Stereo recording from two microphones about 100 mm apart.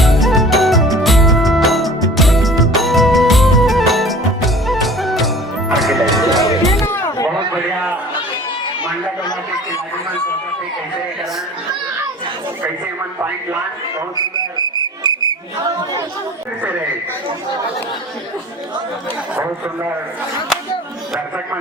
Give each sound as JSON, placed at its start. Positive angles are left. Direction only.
{"t": 0.0, "sound": "music", "side_deg": 0}
{"t": 6.8, "sound": "a sound", "side_deg": 25}
{"t": 14.2, "sound": "speech", "side_deg": -45}